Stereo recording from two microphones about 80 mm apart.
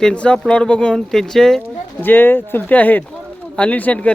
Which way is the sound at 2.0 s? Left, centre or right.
Left.